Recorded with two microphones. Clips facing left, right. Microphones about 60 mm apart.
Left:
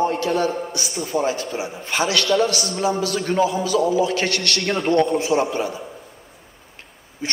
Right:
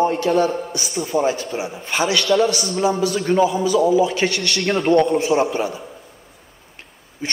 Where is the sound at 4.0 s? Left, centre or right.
Centre.